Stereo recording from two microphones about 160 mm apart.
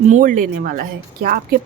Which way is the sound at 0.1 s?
55° right (ahead or behind).